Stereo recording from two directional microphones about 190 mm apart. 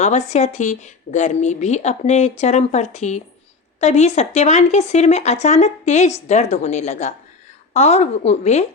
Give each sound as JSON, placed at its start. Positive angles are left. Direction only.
{"t": 0.0, "sound": "speech", "side_deg": 35}